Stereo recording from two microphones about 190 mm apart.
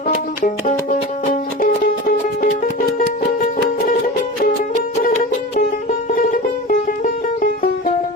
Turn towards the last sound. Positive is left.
turn(degrees=45)  # may be behind; listen again after turning